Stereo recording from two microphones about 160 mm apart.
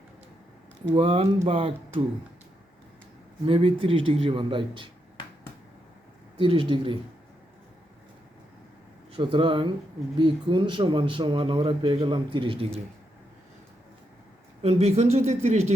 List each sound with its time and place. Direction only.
0.9 s speech: 35° right (ahead or behind)
3.4 s speech: 35° right (ahead or behind)
6.4 s speech: 30° right (ahead or behind)
9.1 s speech: 30° right (ahead or behind)
14.6 s speech: 40° right (ahead or behind)